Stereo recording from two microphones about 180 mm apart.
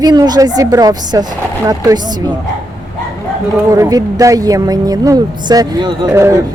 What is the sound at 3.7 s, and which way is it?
A woman's voice, 20° right (ahead or behind).